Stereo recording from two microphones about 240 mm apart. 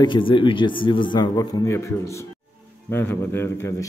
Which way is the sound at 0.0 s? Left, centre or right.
Centre.